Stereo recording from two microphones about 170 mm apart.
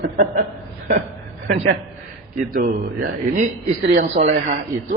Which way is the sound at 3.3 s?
45° right (ahead or behind).